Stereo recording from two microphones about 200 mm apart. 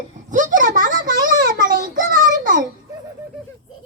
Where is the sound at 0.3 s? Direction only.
40° right (ahead or behind).